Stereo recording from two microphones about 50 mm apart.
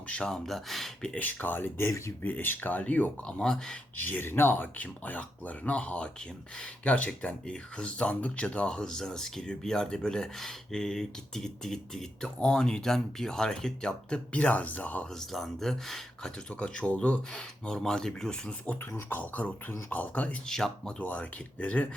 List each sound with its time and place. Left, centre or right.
0.1 s speech: left
0.3 s speech: centre
1.2 s speech: left
3.2 s speech: centre
3.9 s speech: left; by 14.2 s centre
14.3 s speech: left
15.2 s speech: centre
16.5 s speech: centre
17.3 s speech: centre
18.9 s speech: left
20.5 s speech: centre
21.0 s speech: left